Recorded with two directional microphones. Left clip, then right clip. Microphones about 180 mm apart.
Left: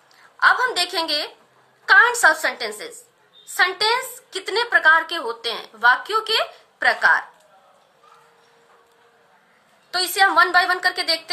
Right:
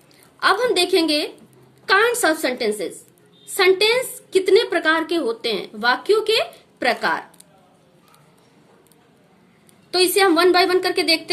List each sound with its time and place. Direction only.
0.4 s speech: 20° right (ahead or behind)
9.9 s speech: 20° right (ahead or behind)